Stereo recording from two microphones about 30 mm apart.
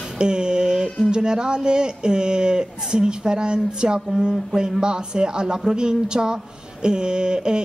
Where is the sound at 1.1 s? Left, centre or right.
Right.